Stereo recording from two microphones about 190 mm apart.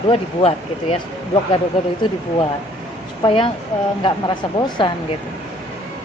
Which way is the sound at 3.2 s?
30° left (ahead or behind).